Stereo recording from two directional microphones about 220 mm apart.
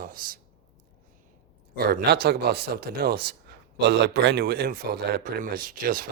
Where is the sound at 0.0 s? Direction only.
40° right (ahead or behind).